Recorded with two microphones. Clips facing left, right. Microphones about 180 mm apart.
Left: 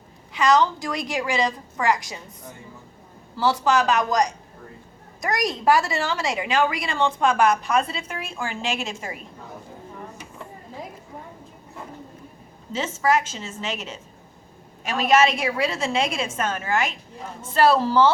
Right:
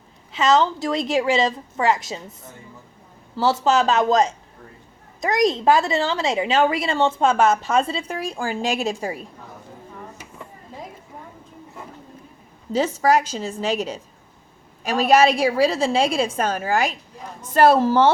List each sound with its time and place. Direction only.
0.3 s a woman's voice: 25° right (ahead or behind)
3.3 s a woman's voice: 25° right (ahead or behind)
12.7 s a woman's voice: 35° right (ahead or behind)
17.5 s a woman's voice: 45° right (ahead or behind)